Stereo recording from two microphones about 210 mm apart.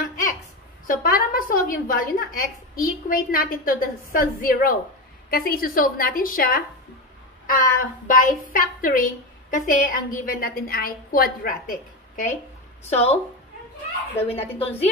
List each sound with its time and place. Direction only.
0.8 s a woman's voice: 40° left (ahead or behind)
12.9 s a woman's voice: 30° left (ahead or behind)
14.3 s a woman's voice: 30° left (ahead or behind)